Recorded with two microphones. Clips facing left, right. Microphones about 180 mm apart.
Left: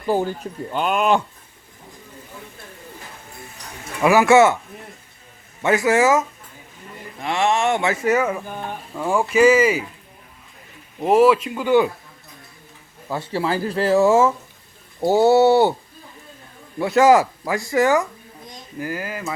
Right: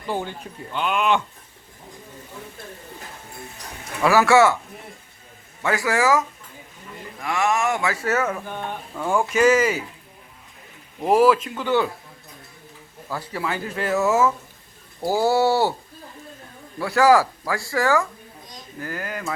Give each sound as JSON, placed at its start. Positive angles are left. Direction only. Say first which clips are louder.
{"t": 0.1, "sound": "speech", "louder": "left 7 dB", "side_deg": 40}
{"t": 4.0, "sound": "speech", "louder": "left 3 dB", "side_deg": 15}
{"t": 5.6, "sound": "speech", "louder": "left 4 dB", "side_deg": 20}
{"t": 11.0, "sound": "speech", "louder": "left 2 dB", "side_deg": 5}
{"t": 13.1, "sound": "speech", "louder": "left 5 dB", "side_deg": 25}
{"t": 16.7, "sound": "speech", "louder": "left 3 dB", "side_deg": 20}